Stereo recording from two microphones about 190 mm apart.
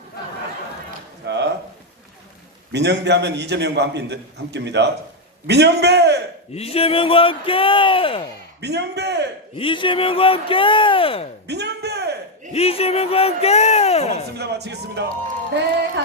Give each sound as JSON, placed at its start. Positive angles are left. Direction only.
{"t": 1.2, "sound": "a sound", "side_deg": -65}
{"t": 2.7, "sound": "a man's voice", "side_deg": -65}
{"t": 6.5, "sound": "speech", "side_deg": 30}
{"t": 8.6, "sound": "a man's voice", "side_deg": -60}
{"t": 9.6, "sound": "speech", "side_deg": 25}
{"t": 11.4, "sound": "a sound", "side_deg": -60}
{"t": 12.5, "sound": "speech", "side_deg": 30}
{"t": 14.3, "sound": "a man's voice", "side_deg": -60}